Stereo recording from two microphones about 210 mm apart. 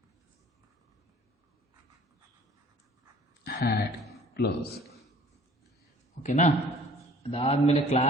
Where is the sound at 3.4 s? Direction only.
50° left (ahead or behind).